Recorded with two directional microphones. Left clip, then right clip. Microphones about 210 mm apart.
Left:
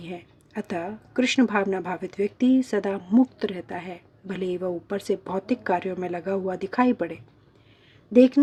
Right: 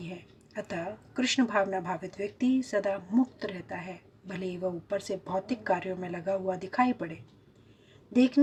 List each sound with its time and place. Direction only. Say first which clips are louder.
0.5 s speech: left 4 dB; 45° left (ahead or behind)